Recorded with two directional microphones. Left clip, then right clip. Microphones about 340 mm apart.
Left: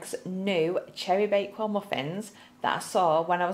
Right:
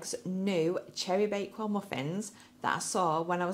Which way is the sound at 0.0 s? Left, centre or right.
Right.